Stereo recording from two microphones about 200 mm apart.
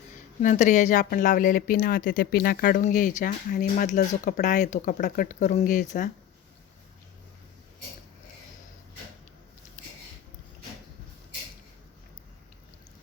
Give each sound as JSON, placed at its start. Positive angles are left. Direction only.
{"t": 0.4, "sound": "speech", "side_deg": 35}